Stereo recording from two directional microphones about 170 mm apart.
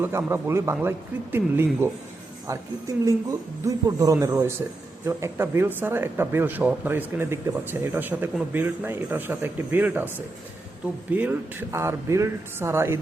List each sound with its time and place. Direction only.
0.0 s speech: 15° right (ahead or behind)